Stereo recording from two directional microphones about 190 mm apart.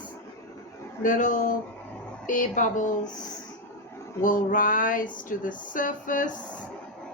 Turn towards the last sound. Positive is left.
turn(degrees=45)  # may be behind; listen again after turning